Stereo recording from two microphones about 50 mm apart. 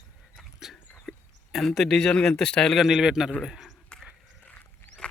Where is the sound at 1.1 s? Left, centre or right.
Centre.